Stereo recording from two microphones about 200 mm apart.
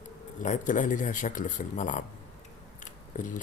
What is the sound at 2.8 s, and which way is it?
Scissors, 40° left (ahead or behind).